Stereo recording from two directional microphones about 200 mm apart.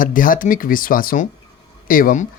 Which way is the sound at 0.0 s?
45° left (ahead or behind).